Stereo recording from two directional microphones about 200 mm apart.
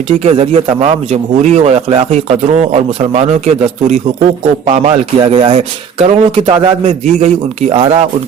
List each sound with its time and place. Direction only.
0.2 s a man's voice: 30° right (ahead or behind)